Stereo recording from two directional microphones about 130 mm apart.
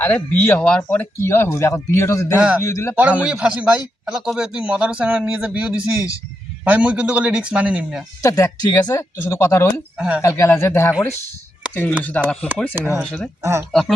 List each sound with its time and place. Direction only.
0.0 s speech: 15° left (ahead or behind)
3.0 s a man's voice: 10° right (ahead or behind)
8.2 s speech: 25° left (ahead or behind)
10.0 s a man's voice: 10° right (ahead or behind)
10.2 s speech: 20° left (ahead or behind)
12.7 s a man's voice: 15° right (ahead or behind)
13.0 s speech: 5° left (ahead or behind)
13.4 s speech: 20° right (ahead or behind)